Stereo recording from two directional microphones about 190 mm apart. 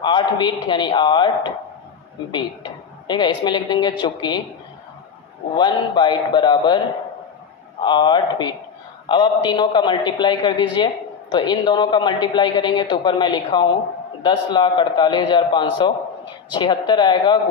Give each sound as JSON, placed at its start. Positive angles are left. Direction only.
{"t": 0.0, "sound": "a woman's voice", "side_deg": 25}
{"t": 5.5, "sound": "a woman's voice", "side_deg": 25}
{"t": 7.8, "sound": "a woman's voice", "side_deg": 25}